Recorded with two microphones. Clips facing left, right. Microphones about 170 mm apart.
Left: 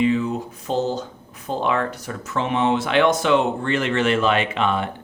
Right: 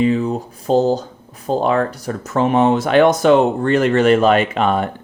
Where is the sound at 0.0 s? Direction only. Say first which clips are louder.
Right 3 dB; 35° right (ahead or behind).